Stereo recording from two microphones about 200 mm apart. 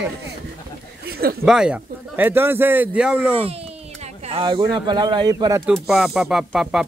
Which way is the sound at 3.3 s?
30° right (ahead or behind).